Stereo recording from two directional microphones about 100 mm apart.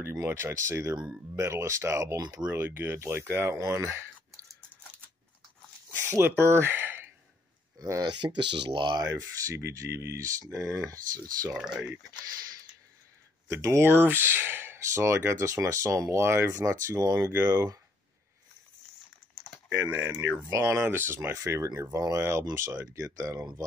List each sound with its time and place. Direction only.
0.0 s speech: 25° right (ahead or behind)
2.4 s speech: 20° right (ahead or behind)
5.9 s speech: 25° right (ahead or behind)
7.8 s speech: 40° right (ahead or behind)
9.0 s speech: 30° right (ahead or behind)
11.5 s speech: 10° right (ahead or behind)
13.5 s speech: 30° right (ahead or behind)
20.0 s speech: 30° right (ahead or behind)